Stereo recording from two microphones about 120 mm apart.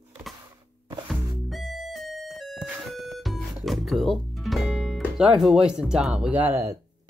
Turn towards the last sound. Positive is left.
turn(degrees=-20)  # may be behind; listen again after turning